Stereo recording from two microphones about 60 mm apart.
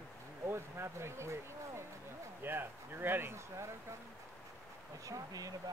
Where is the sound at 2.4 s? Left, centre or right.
Right.